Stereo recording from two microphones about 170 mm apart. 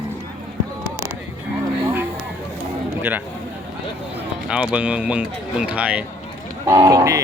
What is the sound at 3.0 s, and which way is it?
Speech, 10° right (ahead or behind).